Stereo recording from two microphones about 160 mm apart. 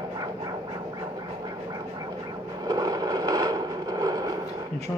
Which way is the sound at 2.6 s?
25° right (ahead or behind).